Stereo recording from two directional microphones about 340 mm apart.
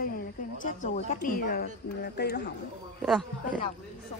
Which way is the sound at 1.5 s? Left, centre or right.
Left.